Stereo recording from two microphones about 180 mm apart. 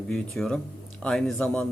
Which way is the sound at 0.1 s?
5° left (ahead or behind).